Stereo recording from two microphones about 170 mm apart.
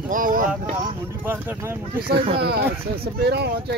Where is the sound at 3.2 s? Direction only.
70° right (ahead or behind).